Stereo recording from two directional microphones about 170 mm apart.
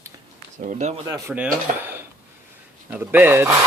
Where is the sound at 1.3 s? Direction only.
5° right (ahead or behind).